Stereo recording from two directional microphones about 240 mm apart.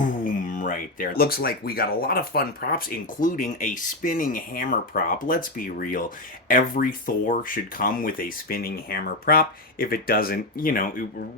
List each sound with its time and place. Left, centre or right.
0.3 s speech: left